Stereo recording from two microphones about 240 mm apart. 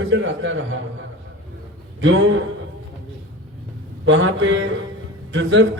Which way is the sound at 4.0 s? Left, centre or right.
Right.